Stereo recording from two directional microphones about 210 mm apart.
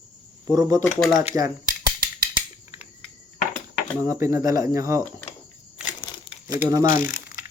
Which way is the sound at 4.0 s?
15° right (ahead or behind).